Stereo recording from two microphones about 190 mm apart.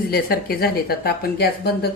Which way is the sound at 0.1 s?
55° left (ahead or behind).